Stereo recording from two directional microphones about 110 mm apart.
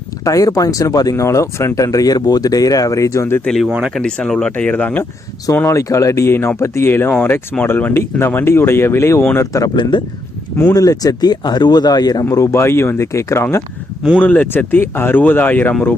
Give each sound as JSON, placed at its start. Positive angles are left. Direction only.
{"t": 0.3, "sound": "speech", "side_deg": 30}
{"t": 3.4, "sound": "speech", "side_deg": 5}
{"t": 3.7, "sound": "speech", "side_deg": -10}
{"t": 3.9, "sound": "speech", "side_deg": 5}
{"t": 5.5, "sound": "speech", "side_deg": 25}
{"t": 10.8, "sound": "speech", "side_deg": 35}
{"t": 14.2, "sound": "speech", "side_deg": 15}